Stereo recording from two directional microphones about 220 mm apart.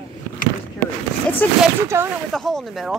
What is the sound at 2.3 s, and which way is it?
Speech, centre (ahead or behind).